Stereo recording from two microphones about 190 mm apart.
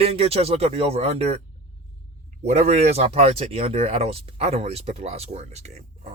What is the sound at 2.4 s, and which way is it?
Speech, 35° right (ahead or behind).